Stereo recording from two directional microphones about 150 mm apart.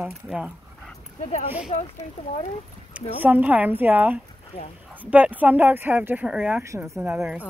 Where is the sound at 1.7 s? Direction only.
50° left (ahead or behind).